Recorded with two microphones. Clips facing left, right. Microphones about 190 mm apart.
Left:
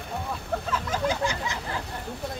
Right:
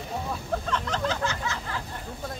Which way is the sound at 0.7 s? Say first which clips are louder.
Left 3 dB; 10° left (ahead or behind).